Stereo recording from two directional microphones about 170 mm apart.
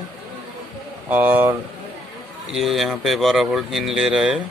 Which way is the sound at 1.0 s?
10° right (ahead or behind).